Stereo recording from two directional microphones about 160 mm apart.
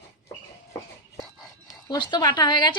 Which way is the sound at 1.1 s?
20° left (ahead or behind).